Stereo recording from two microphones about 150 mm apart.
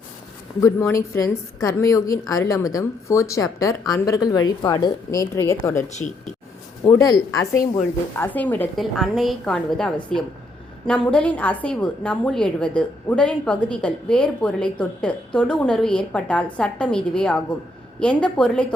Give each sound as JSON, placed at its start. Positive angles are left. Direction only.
{"t": 0.6, "sound": "speech", "side_deg": 20}
{"t": 5.9, "sound": "speech", "side_deg": 50}
{"t": 6.9, "sound": "a woman's voice", "side_deg": 20}
{"t": 8.8, "sound": "a woman's voice", "side_deg": 0}